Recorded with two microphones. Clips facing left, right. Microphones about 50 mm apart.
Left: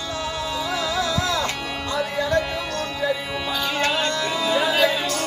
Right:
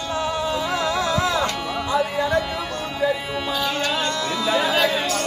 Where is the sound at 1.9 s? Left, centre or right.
Centre.